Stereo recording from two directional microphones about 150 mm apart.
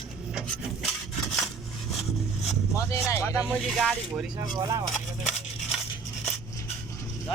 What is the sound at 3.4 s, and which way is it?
Speech, centre (ahead or behind).